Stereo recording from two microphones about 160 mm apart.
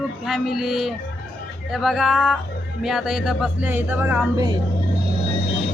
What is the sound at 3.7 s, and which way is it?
Speech, 10° right (ahead or behind).